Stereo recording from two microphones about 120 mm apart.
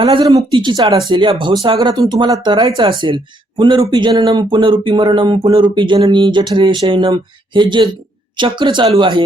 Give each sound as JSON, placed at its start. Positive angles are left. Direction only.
{"t": 0.0, "sound": "speech", "side_deg": -45}